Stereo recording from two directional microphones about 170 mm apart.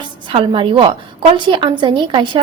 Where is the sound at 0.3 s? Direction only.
30° right (ahead or behind).